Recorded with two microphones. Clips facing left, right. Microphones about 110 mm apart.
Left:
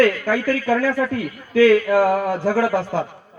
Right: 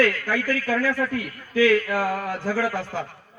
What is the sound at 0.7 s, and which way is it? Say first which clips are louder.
A man's voice: left 4 dB; 35° left (ahead or behind).